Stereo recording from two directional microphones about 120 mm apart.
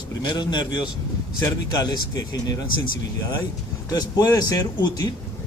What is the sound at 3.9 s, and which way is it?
Speech, 30° left (ahead or behind).